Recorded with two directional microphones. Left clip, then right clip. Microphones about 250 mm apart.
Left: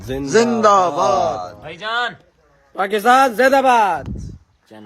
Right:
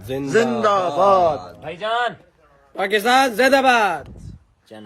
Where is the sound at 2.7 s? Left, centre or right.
Centre.